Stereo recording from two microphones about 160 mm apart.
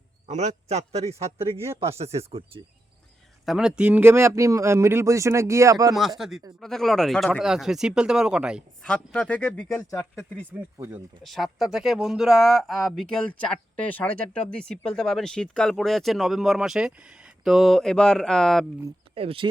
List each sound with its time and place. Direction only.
0.3 s a man's voice: 45° right (ahead or behind)
3.4 s speech: 5° right (ahead or behind); by 5.9 s 20° right (ahead or behind)
5.9 s speech: centre (ahead or behind)
8.8 s speech: 5° left (ahead or behind)
10.5 s speech: 10° right (ahead or behind)
19.1 s speech: 35° right (ahead or behind)